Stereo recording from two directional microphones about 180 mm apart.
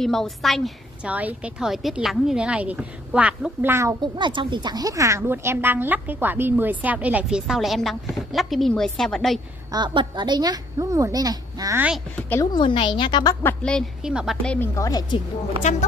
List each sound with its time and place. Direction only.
0.0 s a woman's voice: centre (ahead or behind)
4.0 s a woman's voice: 25° right (ahead or behind); by 9.4 s centre (ahead or behind)
9.7 s a woman's voice: 20° right (ahead or behind)
12.2 s a woman's voice: 10° left (ahead or behind)
12.5 s a woman's voice: 25° left (ahead or behind); by 14.7 s 5° left (ahead or behind)
14.8 s a woman's voice: 20° left (ahead or behind)